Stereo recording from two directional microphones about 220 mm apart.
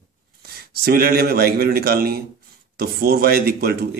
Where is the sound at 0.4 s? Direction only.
45° right (ahead or behind).